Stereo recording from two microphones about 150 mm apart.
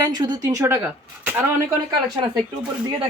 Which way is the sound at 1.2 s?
10° right (ahead or behind).